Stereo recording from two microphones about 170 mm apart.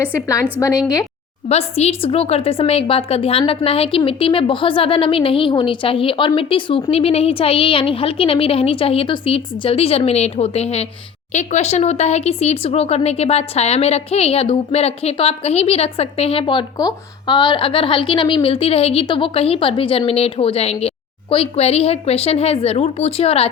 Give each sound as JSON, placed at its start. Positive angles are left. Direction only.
{"t": 1.5, "sound": "speech", "side_deg": 35}